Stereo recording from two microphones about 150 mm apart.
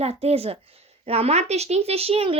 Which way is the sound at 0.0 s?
40° right (ahead or behind).